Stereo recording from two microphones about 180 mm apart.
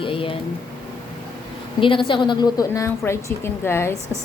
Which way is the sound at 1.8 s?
30° left (ahead or behind).